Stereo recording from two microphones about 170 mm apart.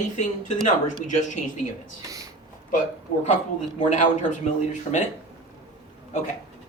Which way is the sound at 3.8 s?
45° left (ahead or behind).